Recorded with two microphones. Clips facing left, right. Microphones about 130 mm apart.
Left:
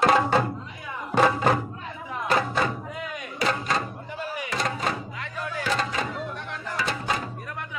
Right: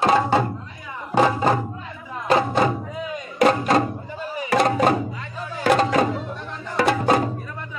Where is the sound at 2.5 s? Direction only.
35° right (ahead or behind).